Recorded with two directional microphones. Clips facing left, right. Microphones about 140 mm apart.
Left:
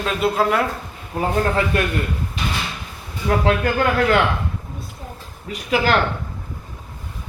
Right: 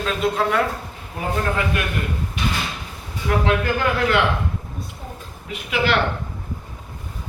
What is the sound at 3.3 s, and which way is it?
Speech, 30° left (ahead or behind).